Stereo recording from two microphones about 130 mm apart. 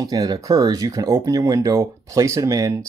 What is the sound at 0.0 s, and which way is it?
Speech, 30° right (ahead or behind).